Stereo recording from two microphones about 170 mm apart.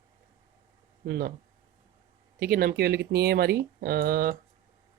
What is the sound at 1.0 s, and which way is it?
Speech, 70° right (ahead or behind).